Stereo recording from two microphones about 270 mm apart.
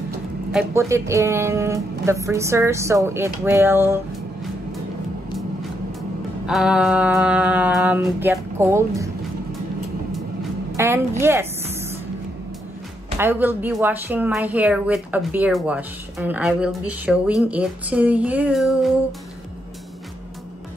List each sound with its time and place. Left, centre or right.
0.5 s speech: centre
6.4 s a woman's voice: centre
10.7 s a sound: centre
13.2 s a woman's voice: centre